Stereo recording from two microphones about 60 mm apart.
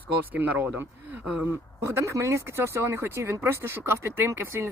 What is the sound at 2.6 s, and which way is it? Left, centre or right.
A woman's voice, right.